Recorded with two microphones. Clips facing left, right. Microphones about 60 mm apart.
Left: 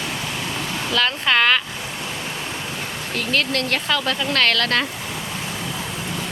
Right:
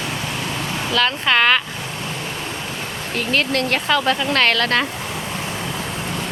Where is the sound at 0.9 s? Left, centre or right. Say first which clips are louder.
Right 1 dB; centre.